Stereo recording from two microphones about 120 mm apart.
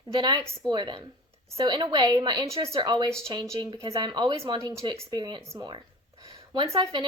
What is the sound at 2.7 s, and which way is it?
A woman's voice, 40° right (ahead or behind).